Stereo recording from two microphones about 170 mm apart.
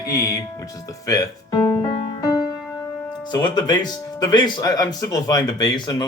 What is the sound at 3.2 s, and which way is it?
Speech, 25° left (ahead or behind).